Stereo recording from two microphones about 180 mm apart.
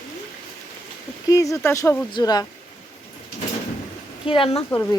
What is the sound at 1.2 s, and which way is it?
Speech, 20° left (ahead or behind).